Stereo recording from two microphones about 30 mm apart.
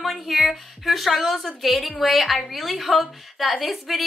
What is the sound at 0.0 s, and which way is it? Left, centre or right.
A woman's voice, centre.